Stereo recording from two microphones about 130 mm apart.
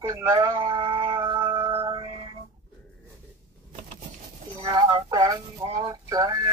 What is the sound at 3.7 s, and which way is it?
Vehicle, 75° right (ahead or behind).